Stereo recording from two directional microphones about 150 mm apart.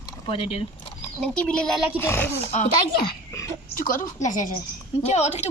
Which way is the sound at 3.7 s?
65° left (ahead or behind).